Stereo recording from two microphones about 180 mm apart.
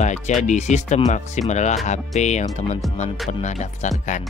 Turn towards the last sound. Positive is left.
turn(degrees=40)  # may be behind; listen again after turning